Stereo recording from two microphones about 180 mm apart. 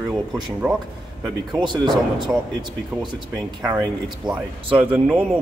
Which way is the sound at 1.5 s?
25° right (ahead or behind).